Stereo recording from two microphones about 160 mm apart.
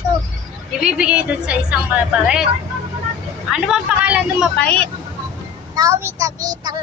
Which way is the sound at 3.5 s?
5° right (ahead or behind).